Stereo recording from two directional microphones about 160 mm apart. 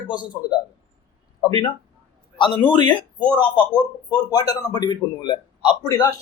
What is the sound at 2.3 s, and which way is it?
A man's voice, 30° left (ahead or behind).